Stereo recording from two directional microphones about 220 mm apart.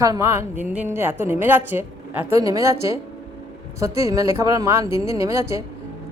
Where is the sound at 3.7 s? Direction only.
15° right (ahead or behind).